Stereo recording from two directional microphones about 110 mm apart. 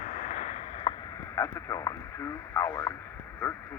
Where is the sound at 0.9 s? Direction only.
50° left (ahead or behind).